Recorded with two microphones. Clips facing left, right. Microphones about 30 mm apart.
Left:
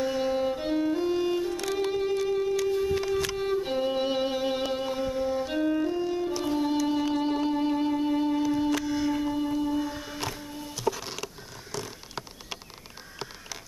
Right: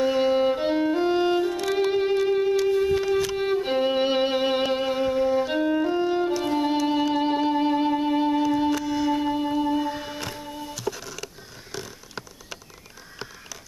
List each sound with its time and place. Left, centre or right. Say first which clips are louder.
0.0 s music: right 6 dB; right
3.3 s violin: right 4 dB; right
6.4 s music: right 3 dB; right
8.8 s music: right 3 dB; centre
9.1 s music: right 4 dB; right